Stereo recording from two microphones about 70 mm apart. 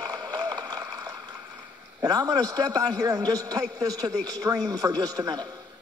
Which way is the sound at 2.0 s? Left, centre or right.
Right.